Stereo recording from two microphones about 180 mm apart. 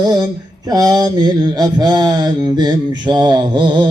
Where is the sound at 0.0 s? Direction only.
20° right (ahead or behind).